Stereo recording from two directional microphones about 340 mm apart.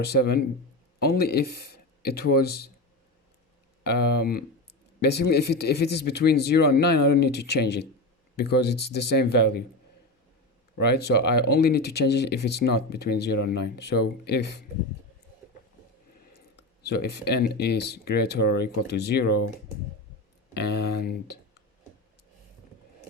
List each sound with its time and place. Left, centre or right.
0.0 s speech: left
3.8 s speech: left
10.8 s speech: left
16.6 s speech: left
20.5 s speech: left